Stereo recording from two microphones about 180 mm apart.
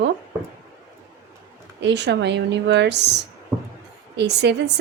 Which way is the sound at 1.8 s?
75° right (ahead or behind).